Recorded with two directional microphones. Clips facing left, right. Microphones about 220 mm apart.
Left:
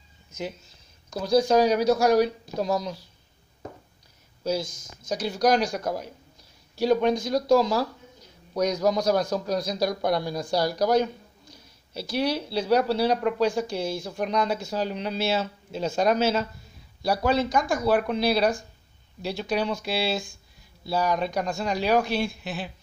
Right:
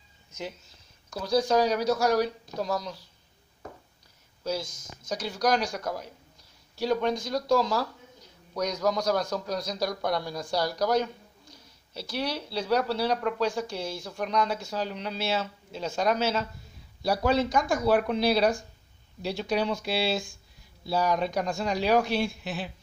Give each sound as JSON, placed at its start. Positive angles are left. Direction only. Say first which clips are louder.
{"t": 1.1, "sound": "speech", "louder": "left 4 dB", "side_deg": 15}
{"t": 4.4, "sound": "speech", "louder": "left 4 dB", "side_deg": 15}
{"t": 10.8, "sound": "speech", "louder": "left 4 dB", "side_deg": 20}
{"t": 11.9, "sound": "speech", "louder": "left 6 dB", "side_deg": 5}
{"t": 16.2, "sound": "speech", "louder": "left 4 dB", "side_deg": 5}